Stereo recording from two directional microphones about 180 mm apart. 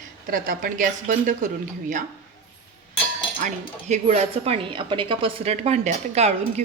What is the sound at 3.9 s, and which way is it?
Speech, 35° right (ahead or behind).